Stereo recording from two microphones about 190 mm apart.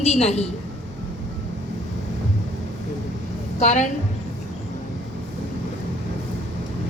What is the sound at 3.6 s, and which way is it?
Speech, 40° left (ahead or behind).